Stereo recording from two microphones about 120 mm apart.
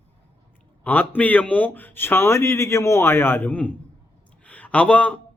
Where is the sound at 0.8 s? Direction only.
15° left (ahead or behind).